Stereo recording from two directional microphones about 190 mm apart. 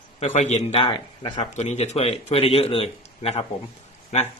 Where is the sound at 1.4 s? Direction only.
35° left (ahead or behind).